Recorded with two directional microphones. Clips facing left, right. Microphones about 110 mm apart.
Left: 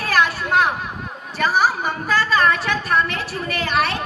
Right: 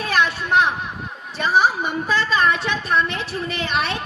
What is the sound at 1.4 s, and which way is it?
A woman's voice, 25° right (ahead or behind).